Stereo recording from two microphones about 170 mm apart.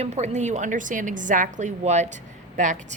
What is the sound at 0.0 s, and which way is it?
A woman's voice, 40° right (ahead or behind).